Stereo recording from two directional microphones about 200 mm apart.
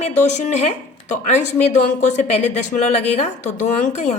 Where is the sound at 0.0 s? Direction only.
35° left (ahead or behind).